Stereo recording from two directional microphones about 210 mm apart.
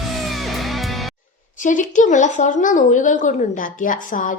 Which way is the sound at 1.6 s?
35° left (ahead or behind).